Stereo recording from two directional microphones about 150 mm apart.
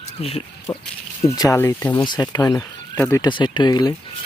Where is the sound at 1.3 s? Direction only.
25° left (ahead or behind).